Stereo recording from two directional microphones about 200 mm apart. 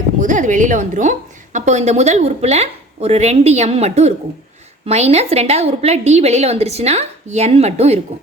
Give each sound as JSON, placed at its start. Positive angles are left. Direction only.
{"t": 0.2, "sound": "a woman's voice", "side_deg": -40}